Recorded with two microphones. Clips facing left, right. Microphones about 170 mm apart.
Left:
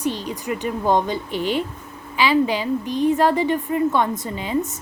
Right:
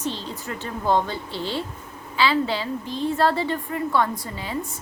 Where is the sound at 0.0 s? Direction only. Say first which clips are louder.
Left 5 dB; 15° left (ahead or behind).